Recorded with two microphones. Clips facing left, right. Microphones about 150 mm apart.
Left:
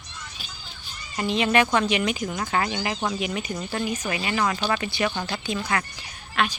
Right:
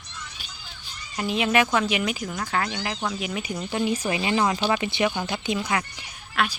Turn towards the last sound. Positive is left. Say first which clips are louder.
# left 1 dB
turn(degrees=-5)  # may be behind; listen again after turning